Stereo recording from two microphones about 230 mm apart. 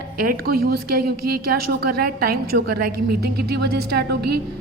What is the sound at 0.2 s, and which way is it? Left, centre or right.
A woman's voice, right.